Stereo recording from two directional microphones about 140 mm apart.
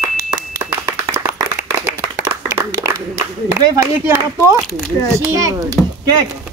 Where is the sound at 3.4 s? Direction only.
20° right (ahead or behind).